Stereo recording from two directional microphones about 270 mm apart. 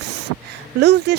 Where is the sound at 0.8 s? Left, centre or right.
Right.